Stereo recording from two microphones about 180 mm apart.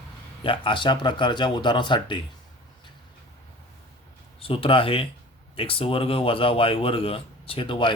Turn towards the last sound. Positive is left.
turn(degrees=25)  # may be behind; listen again after turning